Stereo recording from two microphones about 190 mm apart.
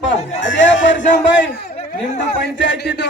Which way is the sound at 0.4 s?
75° left (ahead or behind).